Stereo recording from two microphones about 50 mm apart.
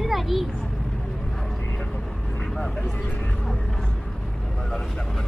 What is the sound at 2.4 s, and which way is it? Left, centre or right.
Vehicle, centre.